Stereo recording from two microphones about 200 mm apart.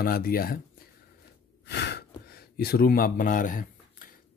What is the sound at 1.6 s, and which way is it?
Gasp, 55° left (ahead or behind).